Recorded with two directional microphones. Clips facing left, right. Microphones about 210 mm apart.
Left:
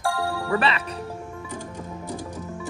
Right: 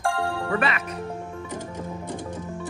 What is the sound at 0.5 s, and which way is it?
Music, 30° left (ahead or behind).